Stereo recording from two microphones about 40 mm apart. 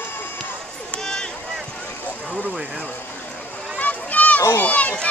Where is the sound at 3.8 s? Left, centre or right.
Left.